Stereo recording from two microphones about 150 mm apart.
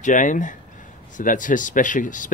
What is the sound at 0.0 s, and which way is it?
Speech, 60° left (ahead or behind).